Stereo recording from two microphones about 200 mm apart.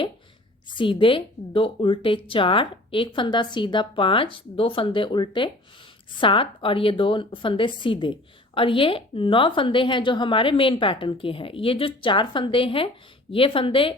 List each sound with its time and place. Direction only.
0.8 s a woman's voice: 25° left (ahead or behind)